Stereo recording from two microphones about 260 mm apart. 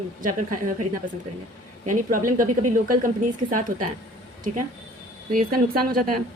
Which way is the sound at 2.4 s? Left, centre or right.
Right.